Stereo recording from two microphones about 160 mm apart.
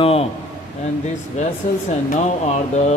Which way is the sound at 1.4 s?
50° left (ahead or behind).